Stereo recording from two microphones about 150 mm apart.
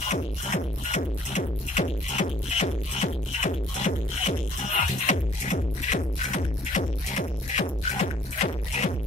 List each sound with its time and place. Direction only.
0.1 s music: 50° left (ahead or behind)